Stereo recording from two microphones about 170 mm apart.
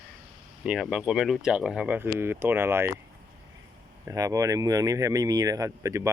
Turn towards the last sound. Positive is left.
turn(degrees=-20)  # may be behind; listen again after turning